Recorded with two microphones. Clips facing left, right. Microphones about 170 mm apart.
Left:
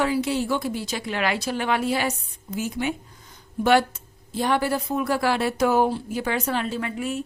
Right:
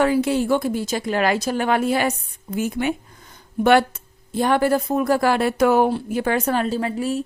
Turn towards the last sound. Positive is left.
turn(degrees=-35)  # may be behind; listen again after turning